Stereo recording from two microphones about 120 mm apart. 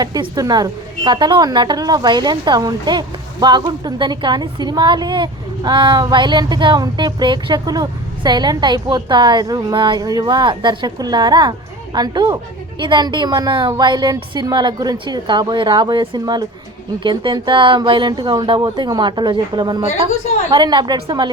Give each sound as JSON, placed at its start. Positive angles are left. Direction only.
{"t": 0.0, "sound": "a woman's voice", "side_deg": -35}